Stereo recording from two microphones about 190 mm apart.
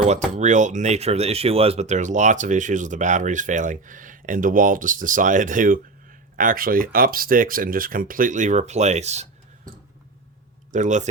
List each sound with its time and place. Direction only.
0.3 s speech: 40° right (ahead or behind)
10.7 s speech: 40° right (ahead or behind)